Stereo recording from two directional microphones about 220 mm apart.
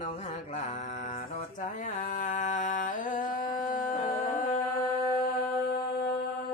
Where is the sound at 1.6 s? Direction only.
35° left (ahead or behind).